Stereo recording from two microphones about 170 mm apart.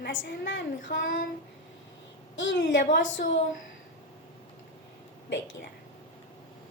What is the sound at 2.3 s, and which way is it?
Speech, 90° left.